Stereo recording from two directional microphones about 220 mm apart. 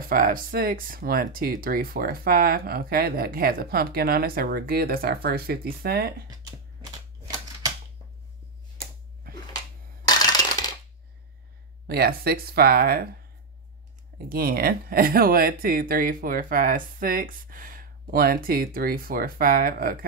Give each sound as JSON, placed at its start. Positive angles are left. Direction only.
{"t": 0.1, "sound": "speech", "side_deg": -40}
{"t": 6.2, "sound": "a sound", "side_deg": -15}
{"t": 10.0, "sound": "coin", "side_deg": 15}
{"t": 11.9, "sound": "speech", "side_deg": -45}
{"t": 14.1, "sound": "speech", "side_deg": -45}